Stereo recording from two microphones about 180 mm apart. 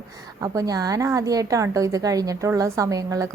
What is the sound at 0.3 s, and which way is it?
A woman's voice, 15° right (ahead or behind).